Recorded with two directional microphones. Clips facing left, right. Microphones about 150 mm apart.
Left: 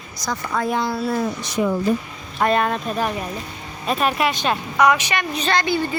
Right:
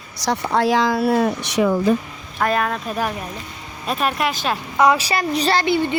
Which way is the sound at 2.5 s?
Centre (ahead or behind).